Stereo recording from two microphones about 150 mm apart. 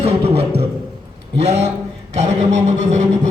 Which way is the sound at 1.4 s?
45° right (ahead or behind).